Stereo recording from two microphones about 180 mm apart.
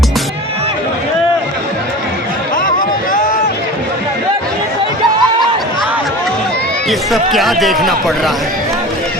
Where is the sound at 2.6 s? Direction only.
50° left (ahead or behind).